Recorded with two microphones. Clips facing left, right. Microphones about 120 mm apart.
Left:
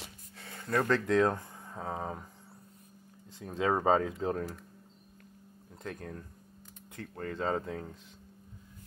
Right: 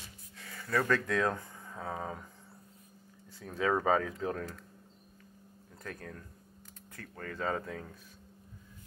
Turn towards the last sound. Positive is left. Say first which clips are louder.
# left 3 dB
turn(degrees=25)  # may be behind; listen again after turning